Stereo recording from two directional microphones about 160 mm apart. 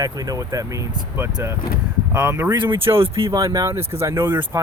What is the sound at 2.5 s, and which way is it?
Speech, 30° right (ahead or behind).